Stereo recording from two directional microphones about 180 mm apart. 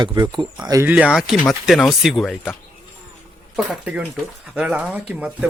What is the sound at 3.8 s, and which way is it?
Speech, 10° right (ahead or behind).